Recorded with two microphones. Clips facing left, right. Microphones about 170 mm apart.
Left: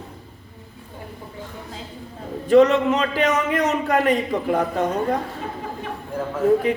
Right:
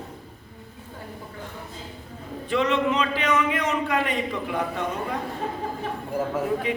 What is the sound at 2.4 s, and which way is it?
A man's voice, 45° left (ahead or behind).